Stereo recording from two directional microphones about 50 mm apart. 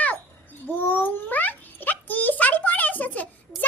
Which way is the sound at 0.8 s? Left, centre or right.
Left.